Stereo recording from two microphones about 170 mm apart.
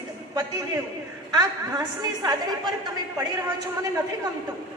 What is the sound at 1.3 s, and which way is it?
A woman's voice, 20° right (ahead or behind).